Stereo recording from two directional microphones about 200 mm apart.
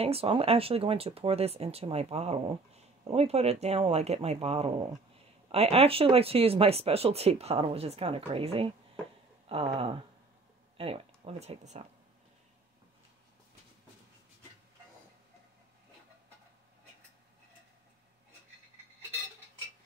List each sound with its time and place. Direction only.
0.0 s speech: 30° right (ahead or behind)